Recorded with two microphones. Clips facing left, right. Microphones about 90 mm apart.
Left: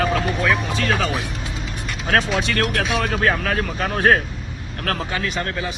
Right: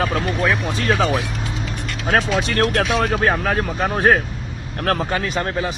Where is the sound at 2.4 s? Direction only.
35° right (ahead or behind).